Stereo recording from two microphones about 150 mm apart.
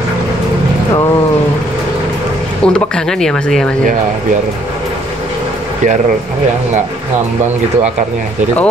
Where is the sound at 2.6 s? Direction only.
5° left (ahead or behind).